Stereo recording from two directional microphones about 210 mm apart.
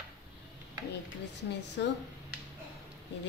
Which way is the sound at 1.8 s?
55° left (ahead or behind).